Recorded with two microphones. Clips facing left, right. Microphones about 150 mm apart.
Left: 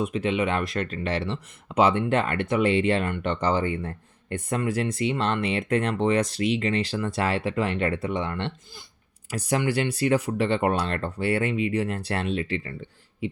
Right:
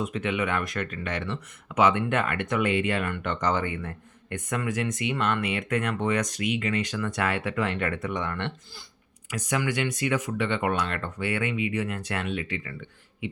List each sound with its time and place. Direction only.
0.0 s speech: 25° left (ahead or behind)
9.3 s speech: 35° left (ahead or behind)